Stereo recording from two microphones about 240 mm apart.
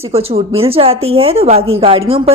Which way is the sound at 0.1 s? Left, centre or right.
Right.